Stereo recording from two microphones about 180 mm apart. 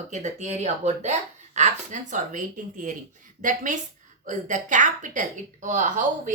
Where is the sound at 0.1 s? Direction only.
40° right (ahead or behind).